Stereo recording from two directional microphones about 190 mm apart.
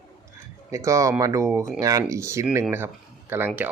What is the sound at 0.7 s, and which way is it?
Speech, 15° right (ahead or behind).